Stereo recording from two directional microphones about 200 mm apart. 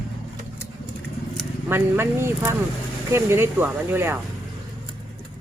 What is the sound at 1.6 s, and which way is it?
Speech, 10° right (ahead or behind).